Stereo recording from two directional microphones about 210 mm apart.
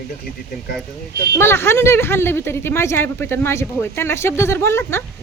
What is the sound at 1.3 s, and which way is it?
A woman's voice, 10° left (ahead or behind).